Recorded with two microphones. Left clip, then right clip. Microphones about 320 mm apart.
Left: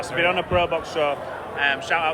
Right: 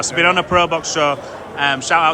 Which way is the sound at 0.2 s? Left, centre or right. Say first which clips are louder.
Right 7 dB; right.